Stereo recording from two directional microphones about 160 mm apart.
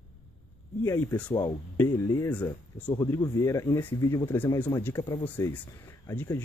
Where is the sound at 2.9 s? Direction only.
25° left (ahead or behind).